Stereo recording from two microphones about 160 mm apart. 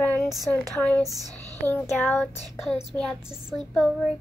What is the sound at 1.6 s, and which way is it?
Child singing, 10° left (ahead or behind).